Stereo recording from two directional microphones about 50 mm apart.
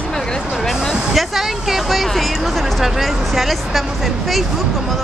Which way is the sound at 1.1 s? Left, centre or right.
Centre.